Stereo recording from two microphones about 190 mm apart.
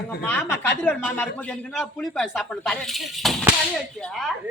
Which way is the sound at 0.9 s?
10° left (ahead or behind).